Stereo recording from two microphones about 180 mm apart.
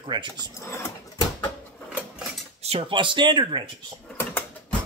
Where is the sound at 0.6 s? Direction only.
15° left (ahead or behind).